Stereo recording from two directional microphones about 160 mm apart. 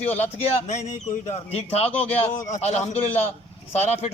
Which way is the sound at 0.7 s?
50° left (ahead or behind).